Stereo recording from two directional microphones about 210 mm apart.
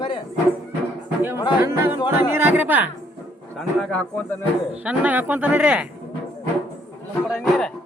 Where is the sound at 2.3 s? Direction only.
10° right (ahead or behind).